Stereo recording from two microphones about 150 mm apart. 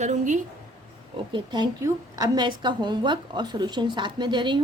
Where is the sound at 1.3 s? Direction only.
30° right (ahead or behind).